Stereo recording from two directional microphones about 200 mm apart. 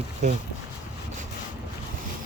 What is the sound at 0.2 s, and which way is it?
Speech, 35° right (ahead or behind).